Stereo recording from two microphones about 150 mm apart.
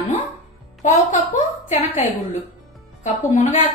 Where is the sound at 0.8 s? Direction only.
55° left (ahead or behind).